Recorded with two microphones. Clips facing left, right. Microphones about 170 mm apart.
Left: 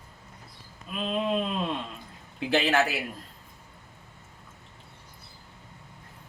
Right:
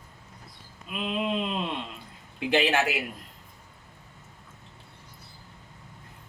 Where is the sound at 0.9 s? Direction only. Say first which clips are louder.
Left 1 dB; 15° right (ahead or behind).